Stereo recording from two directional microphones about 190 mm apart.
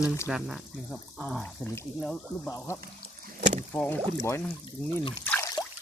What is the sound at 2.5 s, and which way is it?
Speech, 15° left (ahead or behind).